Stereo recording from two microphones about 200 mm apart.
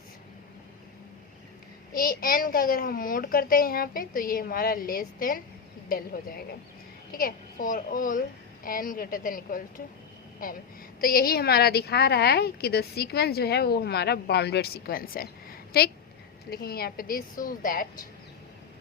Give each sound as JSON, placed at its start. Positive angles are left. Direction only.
{"t": 1.9, "sound": "a woman's voice", "side_deg": 45}
{"t": 11.0, "sound": "a woman's voice", "side_deg": 50}